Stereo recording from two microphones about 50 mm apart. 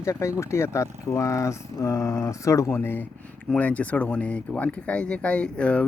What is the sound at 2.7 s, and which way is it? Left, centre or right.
Speech, left.